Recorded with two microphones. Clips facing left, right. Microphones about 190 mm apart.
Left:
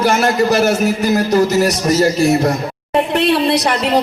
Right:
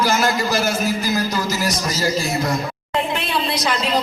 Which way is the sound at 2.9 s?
65° left (ahead or behind).